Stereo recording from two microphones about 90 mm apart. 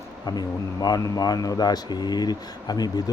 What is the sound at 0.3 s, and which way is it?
Speech, 45° left (ahead or behind).